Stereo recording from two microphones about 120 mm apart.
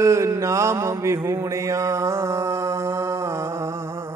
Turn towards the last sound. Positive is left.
turn(degrees=-25)  # may be behind; listen again after turning